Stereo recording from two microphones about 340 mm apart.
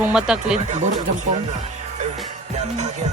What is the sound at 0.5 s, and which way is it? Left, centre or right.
Speech, right.